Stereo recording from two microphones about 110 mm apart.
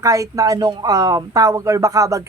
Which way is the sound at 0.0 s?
30° right (ahead or behind).